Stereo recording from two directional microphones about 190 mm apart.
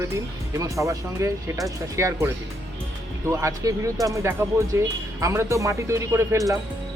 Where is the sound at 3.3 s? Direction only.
15° right (ahead or behind).